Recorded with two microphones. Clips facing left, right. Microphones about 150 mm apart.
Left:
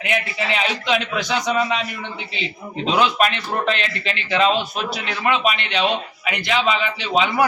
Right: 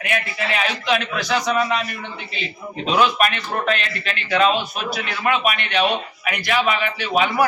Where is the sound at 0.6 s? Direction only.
20° left (ahead or behind).